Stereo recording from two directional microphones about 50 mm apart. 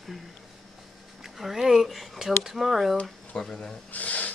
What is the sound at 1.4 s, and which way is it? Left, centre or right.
Speech, centre.